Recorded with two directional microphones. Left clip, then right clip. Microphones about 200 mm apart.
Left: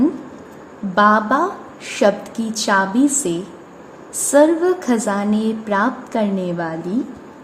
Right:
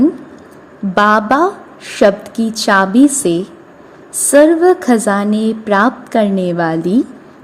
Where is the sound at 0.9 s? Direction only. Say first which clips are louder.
Right 4 dB; 25° right (ahead or behind).